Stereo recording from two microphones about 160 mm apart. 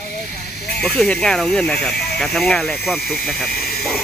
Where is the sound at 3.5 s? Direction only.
70° left (ahead or behind).